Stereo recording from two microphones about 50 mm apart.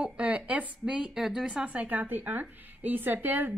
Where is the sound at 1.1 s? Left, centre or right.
Centre.